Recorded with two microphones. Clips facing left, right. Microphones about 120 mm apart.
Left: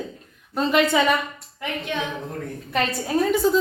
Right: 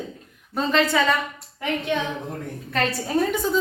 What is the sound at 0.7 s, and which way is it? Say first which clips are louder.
Speech: left 1 dB; 15° left (ahead or behind).